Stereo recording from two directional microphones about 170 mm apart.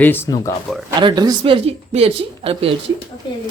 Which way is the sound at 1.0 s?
25° right (ahead or behind).